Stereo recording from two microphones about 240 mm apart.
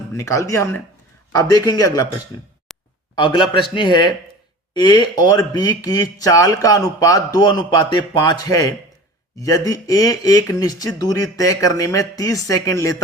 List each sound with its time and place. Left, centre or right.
0.1 s speech: centre
2.7 s a sound: centre
3.2 s speech: centre